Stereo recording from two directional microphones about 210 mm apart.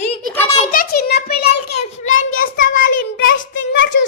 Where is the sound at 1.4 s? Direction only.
30° left (ahead or behind).